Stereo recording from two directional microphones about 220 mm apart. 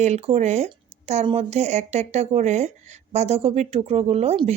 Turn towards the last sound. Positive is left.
turn(degrees=-30)  # may be behind; listen again after turning